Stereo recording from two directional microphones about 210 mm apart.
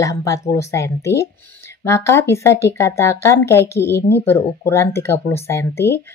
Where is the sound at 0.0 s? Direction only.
15° left (ahead or behind).